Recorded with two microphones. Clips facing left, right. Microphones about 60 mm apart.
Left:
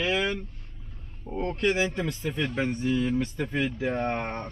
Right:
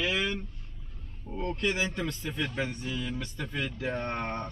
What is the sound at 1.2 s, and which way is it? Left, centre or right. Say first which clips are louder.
Speech: left 3 dB; left.